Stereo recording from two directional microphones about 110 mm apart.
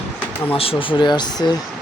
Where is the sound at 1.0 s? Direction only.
40° left (ahead or behind).